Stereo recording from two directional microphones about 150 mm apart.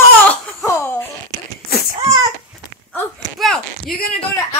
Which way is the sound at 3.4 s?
Centre (ahead or behind).